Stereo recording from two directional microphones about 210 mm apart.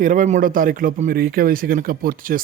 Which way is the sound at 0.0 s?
40° right (ahead or behind).